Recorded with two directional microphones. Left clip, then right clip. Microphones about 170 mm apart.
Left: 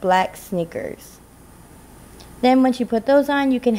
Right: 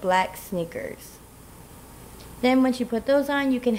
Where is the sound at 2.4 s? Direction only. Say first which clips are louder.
Left 5 dB; 25° left (ahead or behind).